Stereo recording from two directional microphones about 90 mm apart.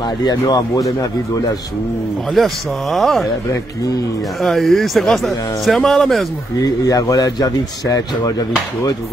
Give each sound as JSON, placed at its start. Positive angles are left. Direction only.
{"t": 0.2, "sound": "a man's voice", "side_deg": 50}
{"t": 2.3, "sound": "speech", "side_deg": 0}
{"t": 4.4, "sound": "speech", "side_deg": 0}
{"t": 6.6, "sound": "a man's voice", "side_deg": 40}